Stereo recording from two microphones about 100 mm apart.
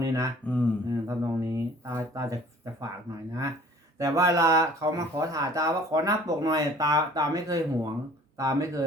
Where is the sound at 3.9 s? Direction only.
30° right (ahead or behind).